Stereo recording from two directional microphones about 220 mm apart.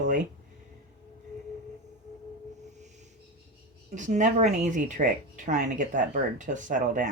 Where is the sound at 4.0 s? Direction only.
35° right (ahead or behind).